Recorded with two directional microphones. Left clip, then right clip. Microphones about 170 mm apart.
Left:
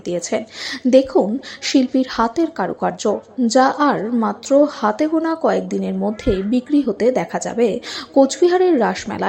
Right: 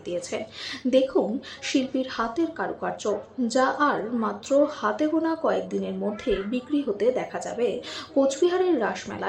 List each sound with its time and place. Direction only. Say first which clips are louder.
0.1 s speech: left 8 dB; 40° left (ahead or behind)